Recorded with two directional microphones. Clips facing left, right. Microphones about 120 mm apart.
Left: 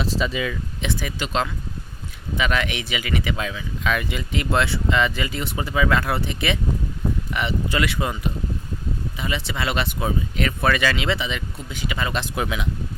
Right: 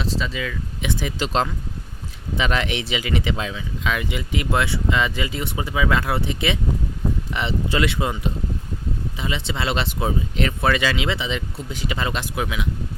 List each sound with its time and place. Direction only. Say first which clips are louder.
0.0 s speech: left 2 dB; 10° left (ahead or behind)
0.8 s speech: right 3 dB; 20° right (ahead or behind)
2.4 s speech: right 1 dB; 30° right (ahead or behind)
12.3 s speech: even; 5° right (ahead or behind)